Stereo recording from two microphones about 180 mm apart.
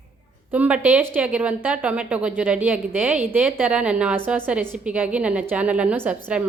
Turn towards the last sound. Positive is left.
turn(degrees=-10)  # may be behind; listen again after turning